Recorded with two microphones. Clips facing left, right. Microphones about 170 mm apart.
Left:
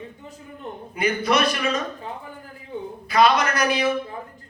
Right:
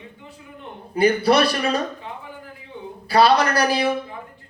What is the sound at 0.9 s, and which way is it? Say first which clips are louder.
Speech: right 5 dB; 35° right (ahead or behind).